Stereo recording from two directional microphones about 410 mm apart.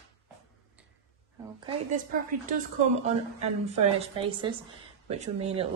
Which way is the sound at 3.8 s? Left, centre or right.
Centre.